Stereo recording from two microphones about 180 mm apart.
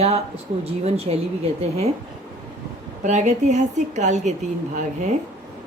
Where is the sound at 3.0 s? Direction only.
40° right (ahead or behind).